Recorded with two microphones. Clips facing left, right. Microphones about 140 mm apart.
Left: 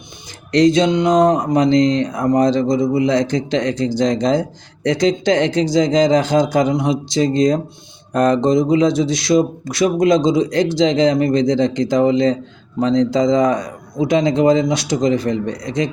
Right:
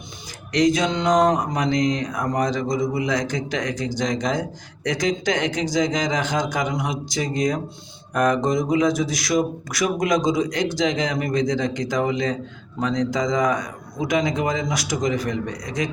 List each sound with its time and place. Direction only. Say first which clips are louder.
0.5 s speech: left 6 dB; 30° left (ahead or behind)